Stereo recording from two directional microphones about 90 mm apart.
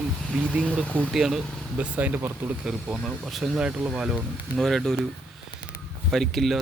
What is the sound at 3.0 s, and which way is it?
Speech, centre (ahead or behind).